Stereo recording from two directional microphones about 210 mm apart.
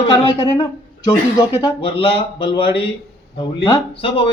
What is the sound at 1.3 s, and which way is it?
Speech, 20° left (ahead or behind).